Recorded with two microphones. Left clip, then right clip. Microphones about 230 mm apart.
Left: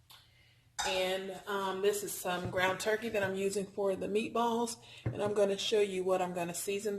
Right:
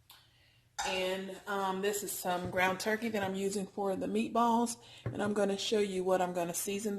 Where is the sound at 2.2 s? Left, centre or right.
Right.